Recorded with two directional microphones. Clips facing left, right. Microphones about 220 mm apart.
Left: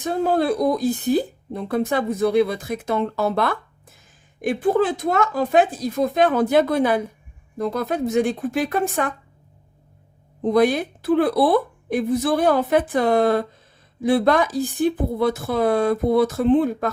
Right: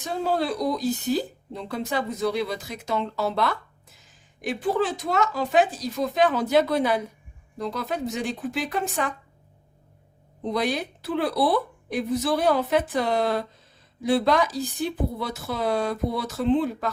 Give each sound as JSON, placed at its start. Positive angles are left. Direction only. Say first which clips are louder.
{"t": 0.0, "sound": "speech", "louder": "left 5 dB", "side_deg": 50}
{"t": 10.4, "sound": "speech", "louder": "left 8 dB", "side_deg": 50}